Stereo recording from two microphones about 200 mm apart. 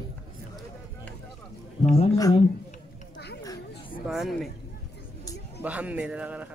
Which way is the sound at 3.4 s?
15° left (ahead or behind).